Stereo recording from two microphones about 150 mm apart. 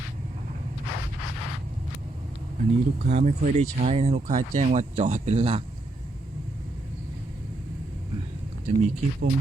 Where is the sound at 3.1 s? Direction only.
50° right (ahead or behind).